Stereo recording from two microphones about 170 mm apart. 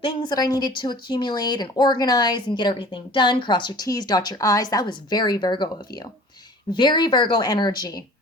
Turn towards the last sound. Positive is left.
turn(degrees=25)  # may be behind; listen again after turning